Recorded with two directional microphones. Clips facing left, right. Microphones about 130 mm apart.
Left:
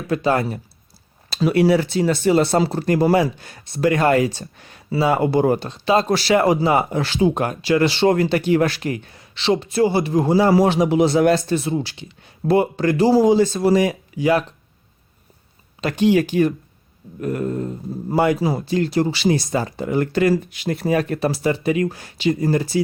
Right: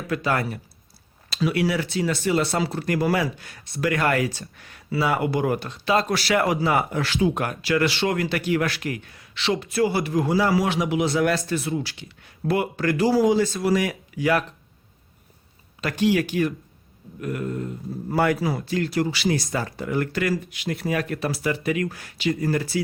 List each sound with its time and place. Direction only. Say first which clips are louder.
0.1 s speech: left 5 dB; 25° left (ahead or behind)
15.8 s speech: left 5 dB; 25° left (ahead or behind)
18.1 s speech: left 4 dB; 20° left (ahead or behind)